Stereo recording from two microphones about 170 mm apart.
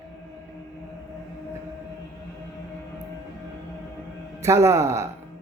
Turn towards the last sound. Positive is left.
turn(degrees=-15)  # may be behind; listen again after turning